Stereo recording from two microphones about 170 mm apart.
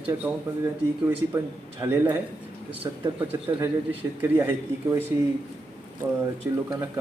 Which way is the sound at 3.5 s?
15° right (ahead or behind).